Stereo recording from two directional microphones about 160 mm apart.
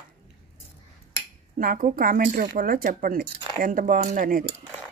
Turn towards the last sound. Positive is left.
turn(degrees=-60)  # may be behind; listen again after turning